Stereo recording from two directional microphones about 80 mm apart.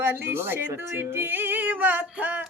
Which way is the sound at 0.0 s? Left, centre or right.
Right.